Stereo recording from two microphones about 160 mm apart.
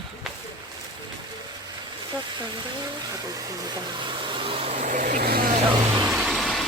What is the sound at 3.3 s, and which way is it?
Speech, 25° right (ahead or behind).